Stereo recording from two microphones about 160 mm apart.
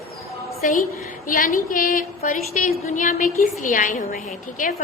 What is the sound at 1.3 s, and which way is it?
A woman's voice, 55° left (ahead or behind).